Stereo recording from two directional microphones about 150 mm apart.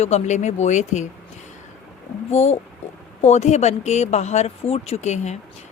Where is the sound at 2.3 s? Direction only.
45° left (ahead or behind).